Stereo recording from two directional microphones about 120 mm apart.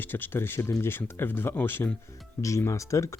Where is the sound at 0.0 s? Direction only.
15° left (ahead or behind).